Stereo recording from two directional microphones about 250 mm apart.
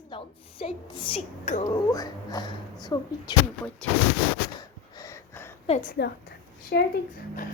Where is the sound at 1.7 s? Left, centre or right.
Centre.